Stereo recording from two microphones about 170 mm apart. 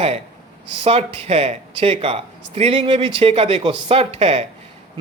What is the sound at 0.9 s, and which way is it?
Speech, 35° right (ahead or behind).